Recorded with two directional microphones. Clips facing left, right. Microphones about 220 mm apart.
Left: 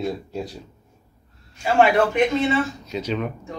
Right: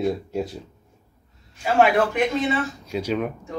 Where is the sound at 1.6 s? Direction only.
5° right (ahead or behind).